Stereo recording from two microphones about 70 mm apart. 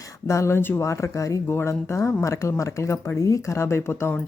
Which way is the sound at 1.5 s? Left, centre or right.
Left.